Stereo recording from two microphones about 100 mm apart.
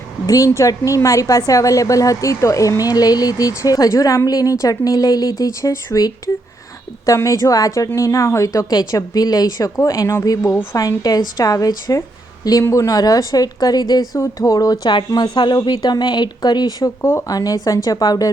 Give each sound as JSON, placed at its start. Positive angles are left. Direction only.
{"t": 0.3, "sound": "a woman's voice", "side_deg": 35}
{"t": 10.8, "sound": "a woman's voice", "side_deg": 40}
{"t": 17.0, "sound": "a woman's voice", "side_deg": 25}
{"t": 17.3, "sound": "a woman's voice", "side_deg": 35}